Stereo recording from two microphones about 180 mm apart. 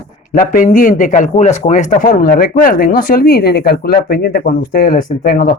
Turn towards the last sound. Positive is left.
turn(degrees=55)  # may be behind; listen again after turning